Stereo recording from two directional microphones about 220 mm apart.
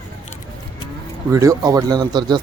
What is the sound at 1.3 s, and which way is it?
Speech, 15° right (ahead or behind).